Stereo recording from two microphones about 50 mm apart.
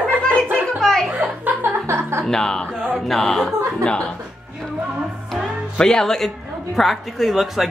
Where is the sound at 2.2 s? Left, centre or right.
Centre.